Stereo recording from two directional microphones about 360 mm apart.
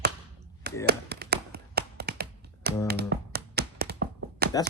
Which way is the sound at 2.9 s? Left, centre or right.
Right.